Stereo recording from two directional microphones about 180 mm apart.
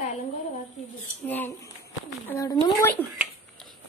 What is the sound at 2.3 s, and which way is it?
Speech, 20° left (ahead or behind).